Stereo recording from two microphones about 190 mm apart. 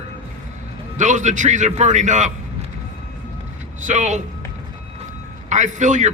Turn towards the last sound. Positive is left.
turn(degrees=-40)  # may be behind; listen again after turning